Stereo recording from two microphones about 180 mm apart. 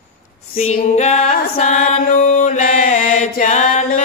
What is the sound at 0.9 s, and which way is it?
Mantra, 40° left (ahead or behind).